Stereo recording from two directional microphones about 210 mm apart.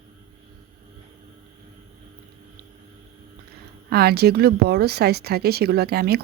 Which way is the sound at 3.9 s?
50° right (ahead or behind).